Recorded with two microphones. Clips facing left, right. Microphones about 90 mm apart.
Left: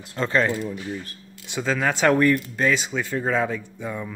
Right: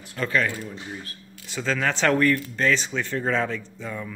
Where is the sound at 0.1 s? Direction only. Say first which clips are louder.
Left 3 dB; 30° left (ahead or behind).